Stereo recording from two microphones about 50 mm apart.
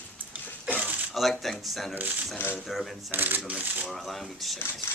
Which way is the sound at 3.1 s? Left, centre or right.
Right.